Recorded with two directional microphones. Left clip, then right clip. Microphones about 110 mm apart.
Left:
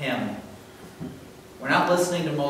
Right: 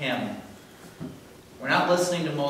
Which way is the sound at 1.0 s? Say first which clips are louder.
Left 1 dB; 40° right (ahead or behind).